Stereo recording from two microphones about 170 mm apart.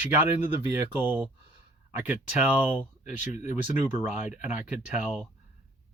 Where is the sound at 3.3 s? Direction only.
45° left (ahead or behind).